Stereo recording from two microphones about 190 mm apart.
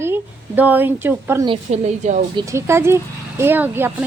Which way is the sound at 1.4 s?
35° right (ahead or behind).